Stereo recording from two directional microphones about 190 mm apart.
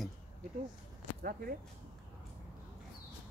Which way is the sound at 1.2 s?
50° right (ahead or behind).